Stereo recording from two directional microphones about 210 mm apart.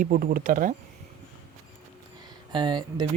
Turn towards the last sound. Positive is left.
turn(degrees=-20)  # may be behind; listen again after turning